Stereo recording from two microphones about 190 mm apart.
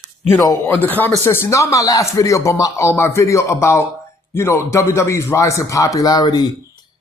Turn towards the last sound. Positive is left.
turn(degrees=20)  # may be behind; listen again after turning